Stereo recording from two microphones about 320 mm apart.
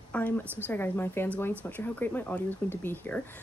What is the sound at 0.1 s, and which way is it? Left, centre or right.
A woman's voice, centre.